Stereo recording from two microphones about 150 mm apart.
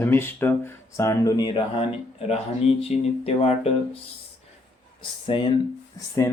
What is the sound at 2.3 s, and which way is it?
Speech, 45° left (ahead or behind).